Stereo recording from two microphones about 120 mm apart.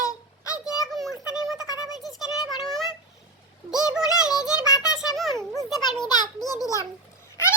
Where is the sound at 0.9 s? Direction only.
Centre (ahead or behind).